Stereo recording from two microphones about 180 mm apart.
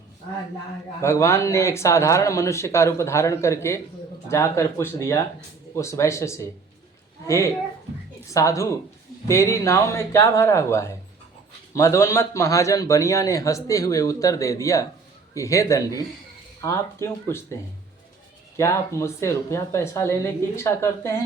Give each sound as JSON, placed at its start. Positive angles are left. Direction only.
{"t": 1.0, "sound": "a man's voice", "side_deg": 15}